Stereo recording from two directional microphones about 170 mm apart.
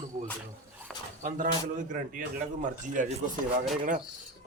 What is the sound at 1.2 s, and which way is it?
Speech, 50° right (ahead or behind).